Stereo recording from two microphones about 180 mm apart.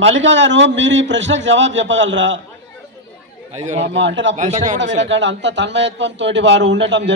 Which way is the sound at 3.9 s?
90° right.